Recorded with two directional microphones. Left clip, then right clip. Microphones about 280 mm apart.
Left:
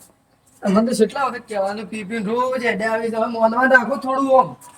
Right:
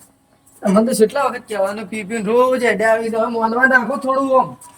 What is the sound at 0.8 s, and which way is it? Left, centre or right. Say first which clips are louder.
A man's voice: right 3 dB; centre.